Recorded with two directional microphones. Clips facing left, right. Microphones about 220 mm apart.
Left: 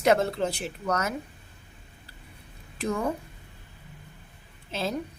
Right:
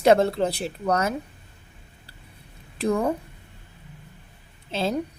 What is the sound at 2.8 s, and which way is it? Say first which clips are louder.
Speech: right 6 dB; 35° right (ahead or behind).